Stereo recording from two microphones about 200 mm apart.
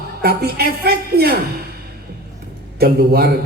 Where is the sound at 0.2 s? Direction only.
50° right (ahead or behind).